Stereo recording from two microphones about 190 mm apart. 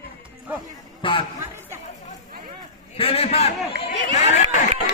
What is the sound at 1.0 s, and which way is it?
Speech, 25° left (ahead or behind).